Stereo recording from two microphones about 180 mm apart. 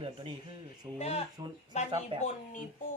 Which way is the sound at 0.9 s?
35° left (ahead or behind).